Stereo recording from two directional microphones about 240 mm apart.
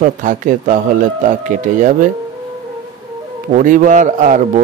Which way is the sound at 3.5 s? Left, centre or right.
Right.